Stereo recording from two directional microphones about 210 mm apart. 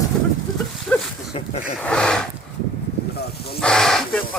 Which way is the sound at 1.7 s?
5° left (ahead or behind).